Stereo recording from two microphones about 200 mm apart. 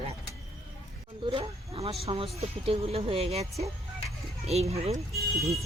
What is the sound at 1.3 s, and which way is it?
Speech, 30° right (ahead or behind).